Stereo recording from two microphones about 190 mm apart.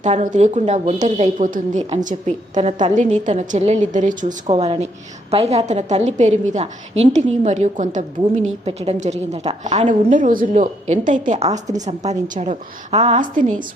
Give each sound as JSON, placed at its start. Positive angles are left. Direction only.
{"t": 0.0, "sound": "a woman's voice", "side_deg": -40}
{"t": 4.4, "sound": "a woman's voice", "side_deg": -30}